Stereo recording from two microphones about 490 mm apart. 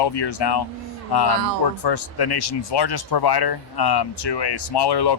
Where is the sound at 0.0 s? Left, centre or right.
Left.